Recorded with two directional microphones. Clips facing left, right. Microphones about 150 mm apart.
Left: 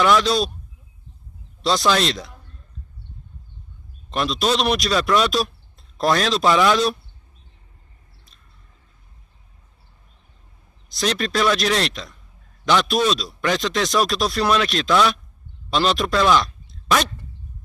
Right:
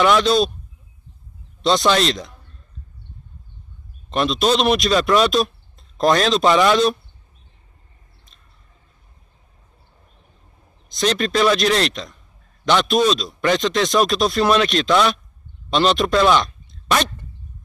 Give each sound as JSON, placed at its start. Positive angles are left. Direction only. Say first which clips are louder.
{"t": 0.0, "sound": "a man's voice", "louder": "right 2 dB", "side_deg": 0}
{"t": 1.6, "sound": "a man's voice", "louder": "right 2 dB", "side_deg": 0}
{"t": 4.1, "sound": "a man's voice", "louder": "right 3 dB", "side_deg": 0}
{"t": 11.0, "sound": "a man's voice", "louder": "right 3 dB", "side_deg": 0}